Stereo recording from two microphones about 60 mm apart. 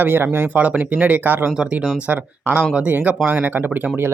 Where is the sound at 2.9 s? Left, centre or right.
Right.